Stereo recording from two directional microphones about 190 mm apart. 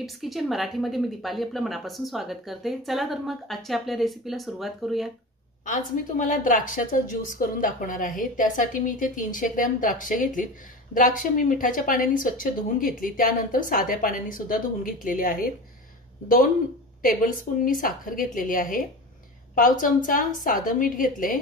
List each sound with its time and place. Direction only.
0.0 s a woman's voice: centre (ahead or behind)
5.7 s a woman's voice: 45° left (ahead or behind)
17.0 s a woman's voice: 45° left (ahead or behind)